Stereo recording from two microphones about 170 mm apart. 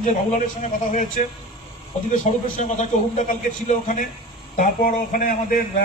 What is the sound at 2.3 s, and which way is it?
A man's voice, 45° left (ahead or behind).